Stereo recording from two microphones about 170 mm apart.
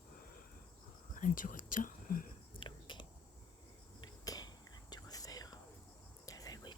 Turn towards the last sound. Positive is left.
turn(degrees=20)  # may be behind; listen again after turning